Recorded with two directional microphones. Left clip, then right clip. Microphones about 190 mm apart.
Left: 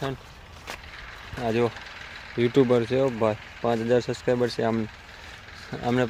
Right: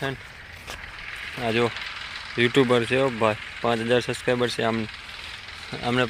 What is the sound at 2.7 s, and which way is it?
Speech, 10° left (ahead or behind).